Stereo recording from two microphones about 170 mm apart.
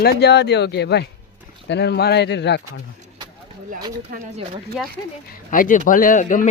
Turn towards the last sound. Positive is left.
turn(degrees=50)  # may be behind; listen again after turning